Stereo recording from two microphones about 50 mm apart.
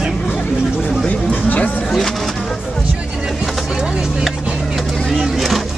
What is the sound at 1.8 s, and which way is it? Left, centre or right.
Speech, centre.